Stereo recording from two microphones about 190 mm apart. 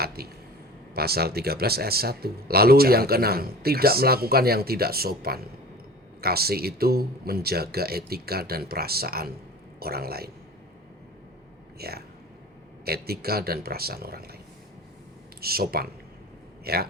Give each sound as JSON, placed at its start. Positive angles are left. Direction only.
{"t": 0.0, "sound": "a sound", "side_deg": -55}
{"t": 0.9, "sound": "a man's voice", "side_deg": -55}
{"t": 11.8, "sound": "a man's voice", "side_deg": -55}
{"t": 15.4, "sound": "a man's voice", "side_deg": -55}